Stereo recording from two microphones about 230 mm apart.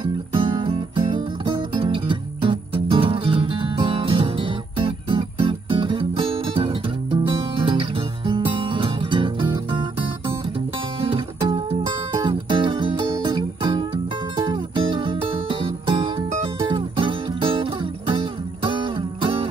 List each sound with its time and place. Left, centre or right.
0.0 s music: right
11.0 s music: right